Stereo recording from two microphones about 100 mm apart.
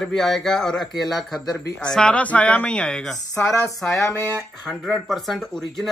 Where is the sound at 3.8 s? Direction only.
30° left (ahead or behind).